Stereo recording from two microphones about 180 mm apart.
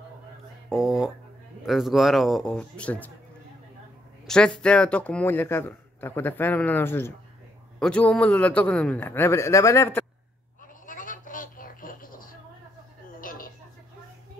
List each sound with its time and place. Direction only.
0.7 s speech: centre (ahead or behind)
4.3 s a man's voice: 5° left (ahead or behind)
10.9 s a sound: 45° left (ahead or behind)